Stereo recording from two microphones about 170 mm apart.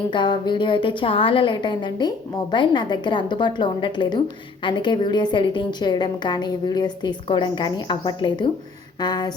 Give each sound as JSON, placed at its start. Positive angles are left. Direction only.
{"t": 0.1, "sound": "a woman's voice", "side_deg": 25}